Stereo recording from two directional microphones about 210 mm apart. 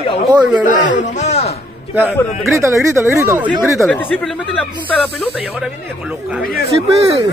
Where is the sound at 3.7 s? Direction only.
5° left (ahead or behind).